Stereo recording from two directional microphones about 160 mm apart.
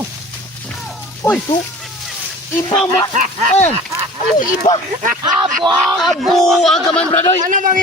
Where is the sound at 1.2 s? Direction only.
15° left (ahead or behind).